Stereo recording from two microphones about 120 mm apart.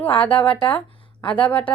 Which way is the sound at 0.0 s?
10° left (ahead or behind).